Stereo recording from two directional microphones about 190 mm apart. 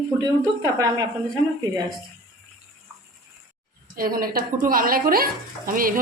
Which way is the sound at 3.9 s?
50° right (ahead or behind).